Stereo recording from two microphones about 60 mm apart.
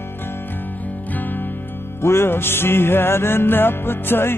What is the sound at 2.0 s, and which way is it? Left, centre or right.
Music, left.